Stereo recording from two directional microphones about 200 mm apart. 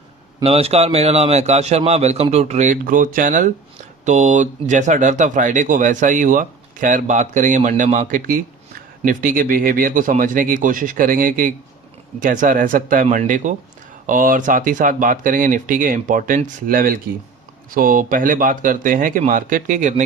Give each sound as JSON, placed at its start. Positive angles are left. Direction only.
{"t": 0.4, "sound": "speech", "side_deg": -30}